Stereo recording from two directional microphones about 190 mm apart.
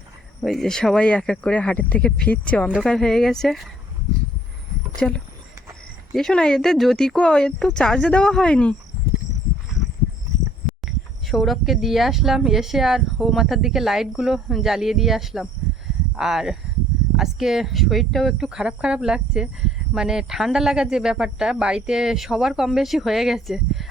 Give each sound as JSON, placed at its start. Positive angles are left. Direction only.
{"t": 0.4, "sound": "speech", "side_deg": 0}
{"t": 4.9, "sound": "speech", "side_deg": 5}
{"t": 11.3, "sound": "speech", "side_deg": 0}